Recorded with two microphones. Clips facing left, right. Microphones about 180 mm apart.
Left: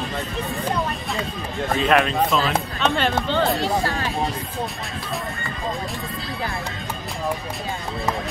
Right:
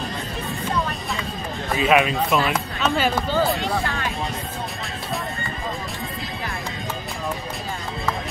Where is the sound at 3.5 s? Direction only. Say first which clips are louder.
Left 2 dB; 35° left (ahead or behind).